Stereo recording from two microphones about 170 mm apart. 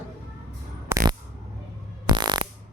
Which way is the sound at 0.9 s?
15° right (ahead or behind).